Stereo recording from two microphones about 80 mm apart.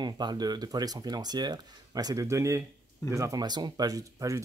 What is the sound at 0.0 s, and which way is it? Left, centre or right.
Speech, right.